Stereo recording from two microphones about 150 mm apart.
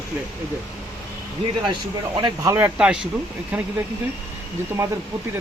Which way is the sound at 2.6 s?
10° right (ahead or behind).